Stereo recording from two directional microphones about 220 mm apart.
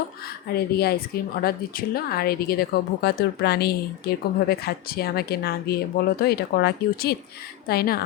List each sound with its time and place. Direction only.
0.5 s a woman's voice: 45° left (ahead or behind)